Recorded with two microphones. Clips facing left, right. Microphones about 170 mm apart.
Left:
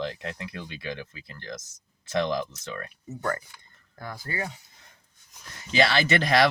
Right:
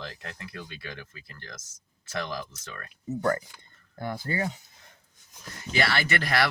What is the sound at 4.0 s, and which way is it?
Speech, 25° right (ahead or behind).